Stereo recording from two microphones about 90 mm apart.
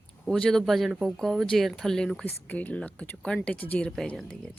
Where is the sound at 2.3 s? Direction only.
20° left (ahead or behind).